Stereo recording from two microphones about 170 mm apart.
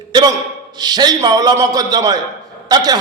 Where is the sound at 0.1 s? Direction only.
25° right (ahead or behind).